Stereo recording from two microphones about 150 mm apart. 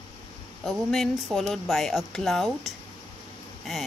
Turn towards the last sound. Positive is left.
turn(degrees=0)  # may be behind; listen again after turning